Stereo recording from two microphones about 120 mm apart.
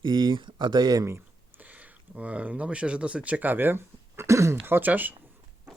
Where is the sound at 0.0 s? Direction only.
40° right (ahead or behind).